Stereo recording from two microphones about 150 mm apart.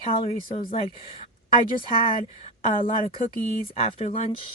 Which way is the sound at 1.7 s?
35° left (ahead or behind).